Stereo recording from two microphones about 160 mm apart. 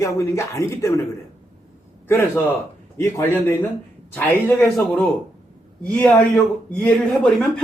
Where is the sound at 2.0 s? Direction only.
15° left (ahead or behind).